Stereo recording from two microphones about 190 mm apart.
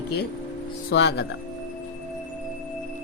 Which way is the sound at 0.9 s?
65° left (ahead or behind).